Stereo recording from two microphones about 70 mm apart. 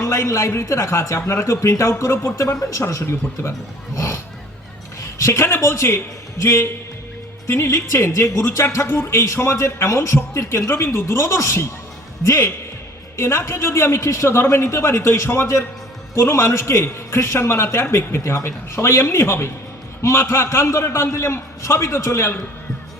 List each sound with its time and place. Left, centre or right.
0.0 s a man's voice: left
2.4 s a man's voice: left